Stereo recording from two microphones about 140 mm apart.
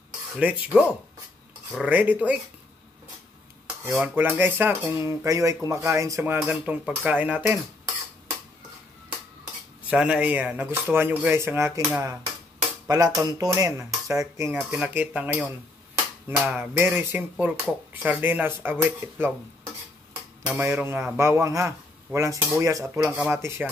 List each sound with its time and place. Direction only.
0.4 s speech: 10° right (ahead or behind)
3.8 s speech: 10° right (ahead or behind)
9.8 s speech: 5° right (ahead or behind)
12.8 s speech: 25° right (ahead or behind)
20.4 s speech: 15° right (ahead or behind)